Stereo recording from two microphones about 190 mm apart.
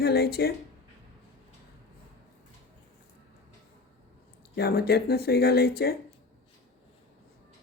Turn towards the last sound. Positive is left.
turn(degrees=55)  # may be behind; listen again after turning